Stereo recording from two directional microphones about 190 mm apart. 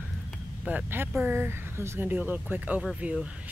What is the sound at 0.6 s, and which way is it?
Speech, 10° right (ahead or behind).